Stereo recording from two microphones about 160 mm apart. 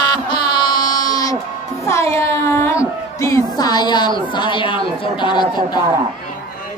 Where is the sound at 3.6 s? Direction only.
25° left (ahead or behind).